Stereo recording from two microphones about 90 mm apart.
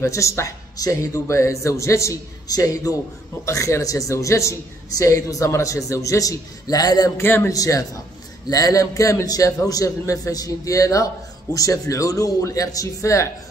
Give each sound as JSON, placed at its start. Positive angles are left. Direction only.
{"t": 0.0, "sound": "a man's voice", "side_deg": 35}
{"t": 7.2, "sound": "a man's voice", "side_deg": 30}
{"t": 7.5, "sound": "a man's voice", "side_deg": 40}